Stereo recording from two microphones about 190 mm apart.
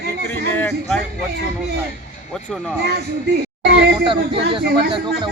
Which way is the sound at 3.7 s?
65° right (ahead or behind).